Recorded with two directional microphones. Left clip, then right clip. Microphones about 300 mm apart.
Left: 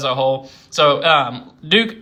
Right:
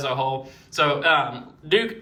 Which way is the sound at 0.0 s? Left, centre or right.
Centre.